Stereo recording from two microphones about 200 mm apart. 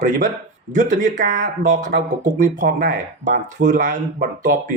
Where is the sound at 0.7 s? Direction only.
40° right (ahead or behind).